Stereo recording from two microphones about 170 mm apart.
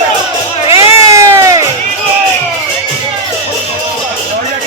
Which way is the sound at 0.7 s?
20° right (ahead or behind).